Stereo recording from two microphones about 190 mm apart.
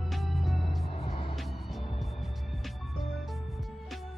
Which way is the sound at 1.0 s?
30° left (ahead or behind).